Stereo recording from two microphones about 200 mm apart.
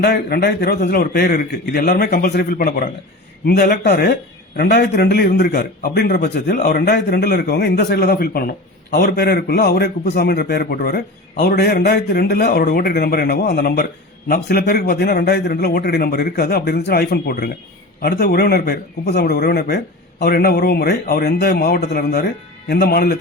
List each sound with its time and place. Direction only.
0.0 s a man's voice: 55° left (ahead or behind)